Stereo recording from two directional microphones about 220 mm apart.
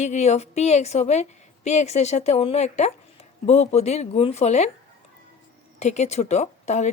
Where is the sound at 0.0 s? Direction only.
30° left (ahead or behind).